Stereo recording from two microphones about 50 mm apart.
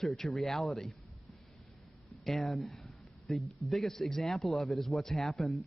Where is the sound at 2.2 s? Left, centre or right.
Centre.